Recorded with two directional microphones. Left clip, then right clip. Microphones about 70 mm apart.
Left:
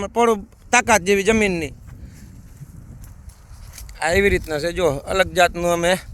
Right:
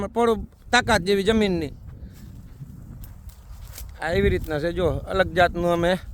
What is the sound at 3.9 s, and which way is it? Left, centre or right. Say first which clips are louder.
Speech: left 5 dB; left.